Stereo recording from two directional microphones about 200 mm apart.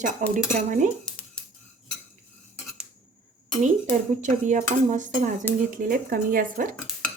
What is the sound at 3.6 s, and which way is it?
Speech, 40° right (ahead or behind).